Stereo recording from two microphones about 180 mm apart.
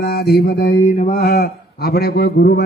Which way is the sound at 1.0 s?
55° left (ahead or behind).